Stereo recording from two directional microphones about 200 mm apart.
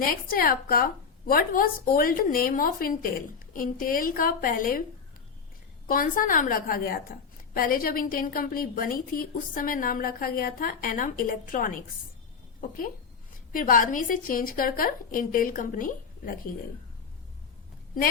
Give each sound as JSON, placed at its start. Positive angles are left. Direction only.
{"t": 0.0, "sound": "a woman's voice", "side_deg": 45}
{"t": 5.9, "sound": "a woman's voice", "side_deg": 45}
{"t": 13.5, "sound": "a woman's voice", "side_deg": 45}